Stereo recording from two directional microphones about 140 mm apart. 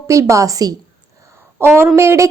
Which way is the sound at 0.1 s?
20° right (ahead or behind).